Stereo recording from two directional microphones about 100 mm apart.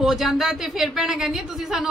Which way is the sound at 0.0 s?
5° right (ahead or behind).